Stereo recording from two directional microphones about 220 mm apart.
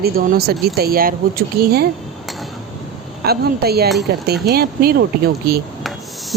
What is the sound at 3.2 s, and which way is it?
Speech, 45° right (ahead or behind).